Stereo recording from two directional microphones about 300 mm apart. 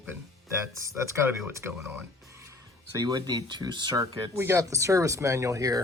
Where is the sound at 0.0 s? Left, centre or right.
Centre.